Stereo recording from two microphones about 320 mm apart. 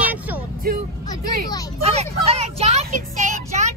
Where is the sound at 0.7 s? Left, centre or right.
Right.